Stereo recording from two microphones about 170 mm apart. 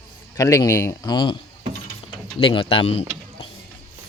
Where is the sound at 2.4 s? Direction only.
30° left (ahead or behind).